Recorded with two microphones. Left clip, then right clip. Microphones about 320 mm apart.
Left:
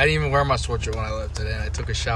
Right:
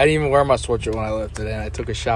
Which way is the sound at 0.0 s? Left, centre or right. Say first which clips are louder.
Right 4 dB; centre.